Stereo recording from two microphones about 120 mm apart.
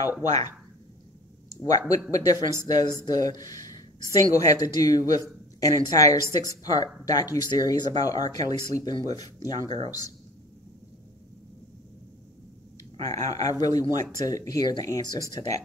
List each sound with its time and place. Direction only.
1.6 s speech: 30° left (ahead or behind)
13.0 s speech: 30° left (ahead or behind)